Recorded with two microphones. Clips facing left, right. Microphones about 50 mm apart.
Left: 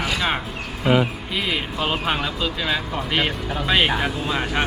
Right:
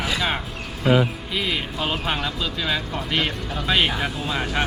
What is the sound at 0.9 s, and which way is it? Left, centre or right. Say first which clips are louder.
Speech: even; left.